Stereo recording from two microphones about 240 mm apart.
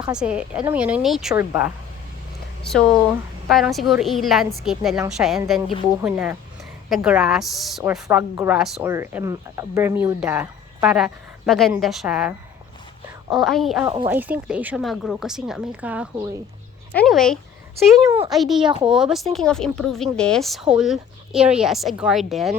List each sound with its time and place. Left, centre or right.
0.1 s a woman's voice: centre
13.3 s a woman's voice: centre
13.8 s speech: centre
14.1 s a woman's voice: centre